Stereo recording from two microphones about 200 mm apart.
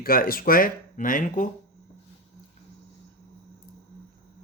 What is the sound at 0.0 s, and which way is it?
Speech, 45° left (ahead or behind).